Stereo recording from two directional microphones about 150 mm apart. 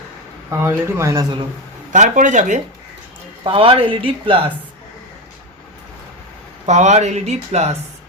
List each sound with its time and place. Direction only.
0.5 s speech: 20° right (ahead or behind)
1.9 s speech: 55° right (ahead or behind)
3.4 s speech: 35° right (ahead or behind)
6.7 s speech: 50° right (ahead or behind)